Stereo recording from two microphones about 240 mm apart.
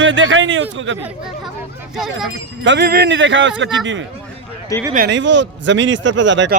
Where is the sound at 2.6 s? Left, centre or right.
Right.